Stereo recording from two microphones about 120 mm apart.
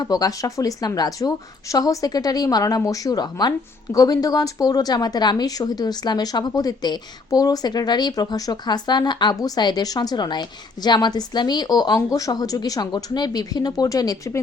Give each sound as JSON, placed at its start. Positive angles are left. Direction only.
{"t": 0.0, "sound": "speech", "side_deg": 30}